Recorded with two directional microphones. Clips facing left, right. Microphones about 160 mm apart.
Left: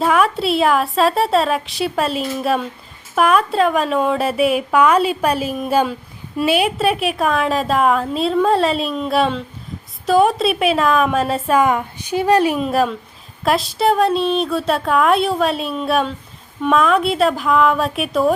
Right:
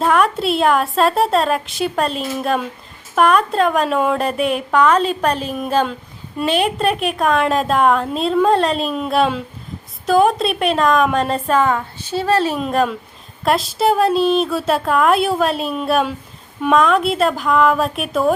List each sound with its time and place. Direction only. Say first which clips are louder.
0.0 s a woman's voice: even; centre (ahead or behind)
12.5 s a woman's voice: even; centre (ahead or behind)